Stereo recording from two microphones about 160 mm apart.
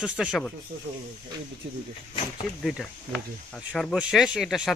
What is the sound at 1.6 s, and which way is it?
Speech, 90° right.